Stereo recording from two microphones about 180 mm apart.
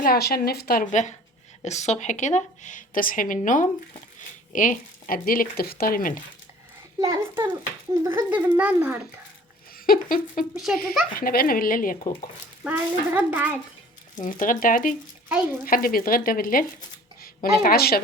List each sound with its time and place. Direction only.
0.0 s a woman's voice: 60° left (ahead or behind)
7.0 s a child's voice: 15° right (ahead or behind)
9.8 s a woman's voice: 50° left (ahead or behind)
10.5 s speech: centre (ahead or behind)
11.1 s a woman's voice: 55° left (ahead or behind)
12.6 s a child's voice: 10° right (ahead or behind)
14.2 s a woman's voice: 45° left (ahead or behind)